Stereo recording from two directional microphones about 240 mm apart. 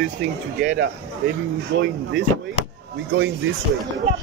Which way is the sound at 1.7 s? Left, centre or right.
Right.